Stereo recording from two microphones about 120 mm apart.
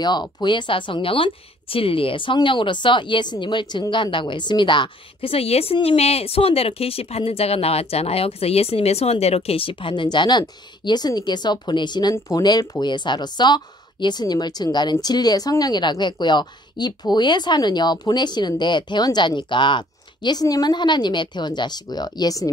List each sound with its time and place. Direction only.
0.0 s speech: 35° left (ahead or behind)